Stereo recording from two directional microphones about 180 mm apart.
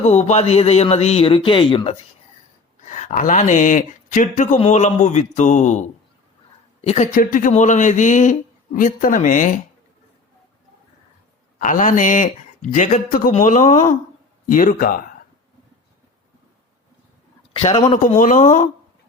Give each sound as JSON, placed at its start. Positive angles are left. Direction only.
{"t": 0.0, "sound": "a man's voice", "side_deg": 40}
{"t": 2.8, "sound": "a man's voice", "side_deg": 40}
{"t": 7.1, "sound": "speech", "side_deg": 50}
{"t": 11.6, "sound": "speech", "side_deg": 45}
{"t": 17.5, "sound": "a man's voice", "side_deg": 30}